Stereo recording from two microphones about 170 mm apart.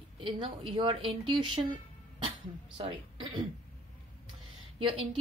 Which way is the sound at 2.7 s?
30° right (ahead or behind).